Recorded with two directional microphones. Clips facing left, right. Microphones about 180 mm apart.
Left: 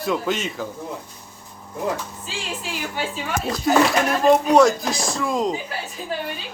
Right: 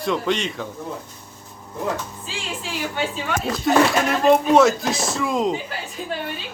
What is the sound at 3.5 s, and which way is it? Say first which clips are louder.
A man's voice: even; centre (ahead or behind).